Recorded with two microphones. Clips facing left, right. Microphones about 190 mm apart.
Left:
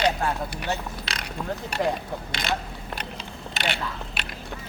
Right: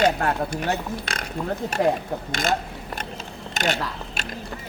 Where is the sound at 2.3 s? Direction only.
45° right (ahead or behind).